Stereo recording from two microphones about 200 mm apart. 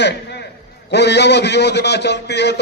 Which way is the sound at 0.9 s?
55° left (ahead or behind).